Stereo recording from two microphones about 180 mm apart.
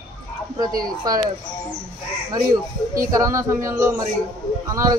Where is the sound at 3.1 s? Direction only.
15° right (ahead or behind).